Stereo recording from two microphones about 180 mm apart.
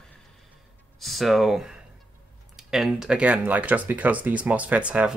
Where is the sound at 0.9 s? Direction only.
Centre (ahead or behind).